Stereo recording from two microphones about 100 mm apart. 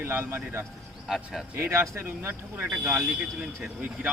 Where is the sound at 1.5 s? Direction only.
25° right (ahead or behind).